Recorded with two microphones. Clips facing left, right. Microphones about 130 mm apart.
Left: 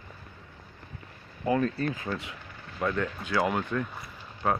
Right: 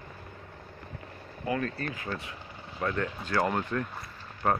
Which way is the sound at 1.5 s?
25° left (ahead or behind).